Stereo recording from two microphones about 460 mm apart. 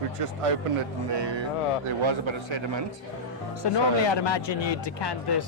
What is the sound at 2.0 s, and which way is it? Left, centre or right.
Speech, right.